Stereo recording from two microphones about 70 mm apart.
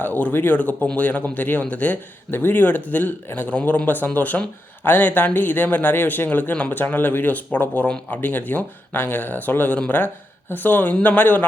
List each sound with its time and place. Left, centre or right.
0.0 s speech: left